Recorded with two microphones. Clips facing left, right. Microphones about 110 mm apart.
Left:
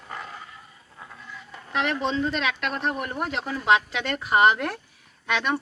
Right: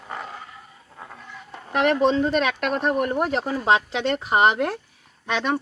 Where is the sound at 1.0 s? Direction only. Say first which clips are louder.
Right 3 dB; 50° right (ahead or behind).